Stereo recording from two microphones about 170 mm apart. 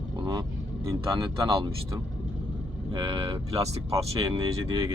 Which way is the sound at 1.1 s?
30° right (ahead or behind).